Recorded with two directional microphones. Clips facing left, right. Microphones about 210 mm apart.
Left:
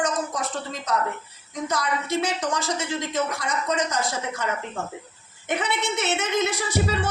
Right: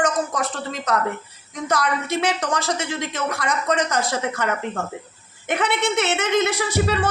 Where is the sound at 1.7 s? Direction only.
80° right.